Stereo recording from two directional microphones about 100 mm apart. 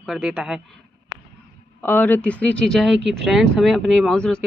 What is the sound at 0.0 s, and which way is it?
Speech, centre (ahead or behind).